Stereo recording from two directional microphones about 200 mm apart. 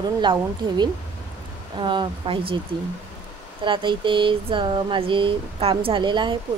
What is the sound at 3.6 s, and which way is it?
Speech, 25° right (ahead or behind).